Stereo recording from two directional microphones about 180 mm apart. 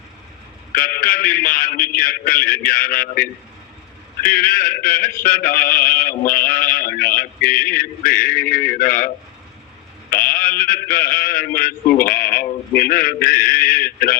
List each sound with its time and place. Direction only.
0.7 s speech: 55° left (ahead or behind)
10.2 s speech: 50° left (ahead or behind)